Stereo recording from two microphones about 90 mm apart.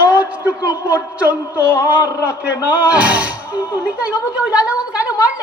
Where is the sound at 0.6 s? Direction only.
45° left (ahead or behind).